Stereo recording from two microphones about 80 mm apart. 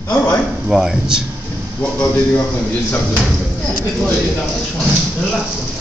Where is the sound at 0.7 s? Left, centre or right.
Centre.